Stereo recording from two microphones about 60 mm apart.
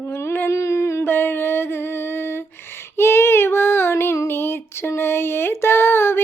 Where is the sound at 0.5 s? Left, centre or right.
Left.